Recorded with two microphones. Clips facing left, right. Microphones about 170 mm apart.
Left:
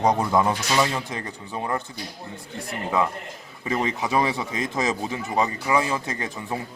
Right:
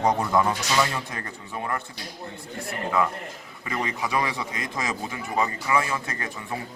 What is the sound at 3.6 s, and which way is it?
Speech, 25° left (ahead or behind).